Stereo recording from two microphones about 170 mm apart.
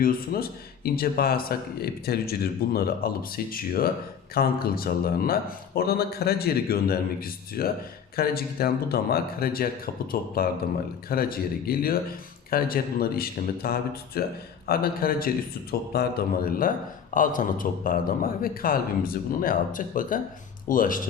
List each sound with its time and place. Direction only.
0.0 s a man's voice: 60° left (ahead or behind)